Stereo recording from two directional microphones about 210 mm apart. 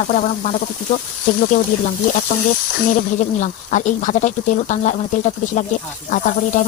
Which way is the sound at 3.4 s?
35° left (ahead or behind).